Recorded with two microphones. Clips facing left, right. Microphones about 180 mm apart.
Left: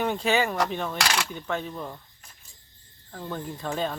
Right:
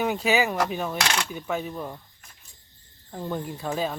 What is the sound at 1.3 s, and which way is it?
Speech, 10° right (ahead or behind).